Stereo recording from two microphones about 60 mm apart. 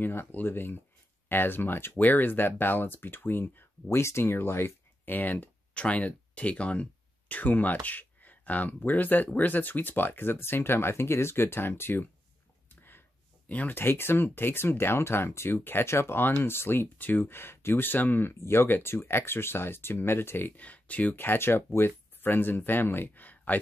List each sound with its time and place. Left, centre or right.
0.0 s speech: left
3.9 s speech: left
12.6 s a sound: left
13.5 s speech: left
13.7 s speech: left